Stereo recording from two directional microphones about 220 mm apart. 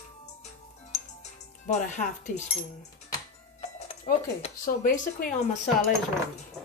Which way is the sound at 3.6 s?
30° left (ahead or behind).